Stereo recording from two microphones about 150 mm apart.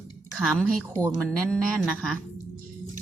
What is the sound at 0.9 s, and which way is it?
Speech, 20° right (ahead or behind).